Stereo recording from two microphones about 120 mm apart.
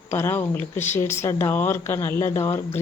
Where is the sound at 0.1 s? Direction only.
20° left (ahead or behind).